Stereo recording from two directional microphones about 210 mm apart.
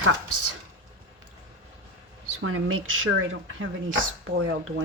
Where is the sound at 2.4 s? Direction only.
80° right.